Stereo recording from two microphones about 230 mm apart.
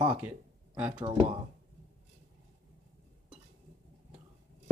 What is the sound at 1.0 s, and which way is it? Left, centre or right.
Speech, centre.